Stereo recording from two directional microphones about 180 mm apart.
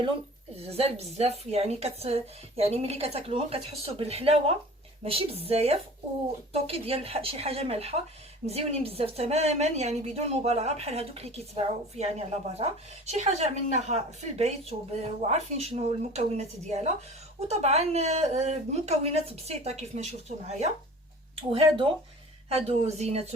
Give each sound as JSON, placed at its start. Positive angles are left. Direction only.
{"t": 0.5, "sound": "a woman's voice", "side_deg": -35}
{"t": 21.3, "sound": "a woman's voice", "side_deg": -30}